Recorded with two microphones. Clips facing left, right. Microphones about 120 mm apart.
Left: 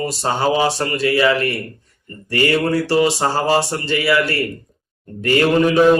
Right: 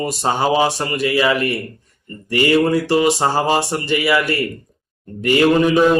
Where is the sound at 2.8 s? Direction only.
20° right (ahead or behind).